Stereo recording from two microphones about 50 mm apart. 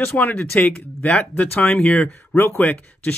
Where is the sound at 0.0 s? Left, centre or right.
Left.